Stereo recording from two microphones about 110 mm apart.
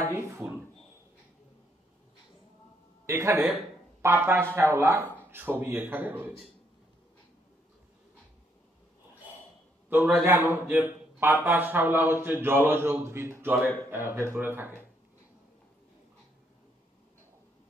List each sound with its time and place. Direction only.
0.1 s drawer open or close: 25° right (ahead or behind)
3.1 s a man's voice: 25° right (ahead or behind)
9.8 s a man's voice: 15° right (ahead or behind)